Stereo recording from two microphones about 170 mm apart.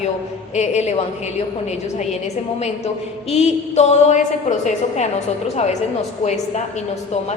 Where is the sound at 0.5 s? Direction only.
40° left (ahead or behind).